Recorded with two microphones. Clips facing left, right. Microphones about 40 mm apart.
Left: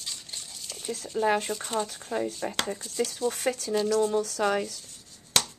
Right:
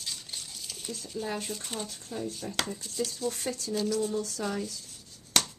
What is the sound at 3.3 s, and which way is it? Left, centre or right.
Speech, left.